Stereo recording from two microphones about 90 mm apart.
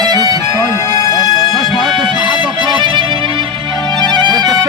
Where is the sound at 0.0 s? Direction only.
50° right (ahead or behind).